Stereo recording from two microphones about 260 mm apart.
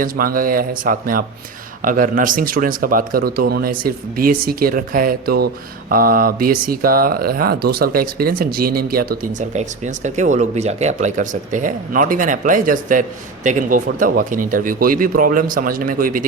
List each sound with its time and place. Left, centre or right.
0.0 s speech: right